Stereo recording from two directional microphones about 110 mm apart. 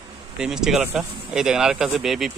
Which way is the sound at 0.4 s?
5° right (ahead or behind).